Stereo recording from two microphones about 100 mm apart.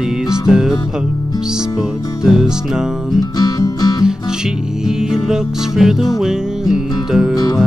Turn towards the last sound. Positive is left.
turn(degrees=-5)  # may be behind; listen again after turning